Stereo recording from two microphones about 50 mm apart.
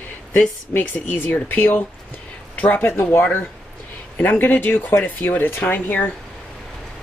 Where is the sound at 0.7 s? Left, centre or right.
Left.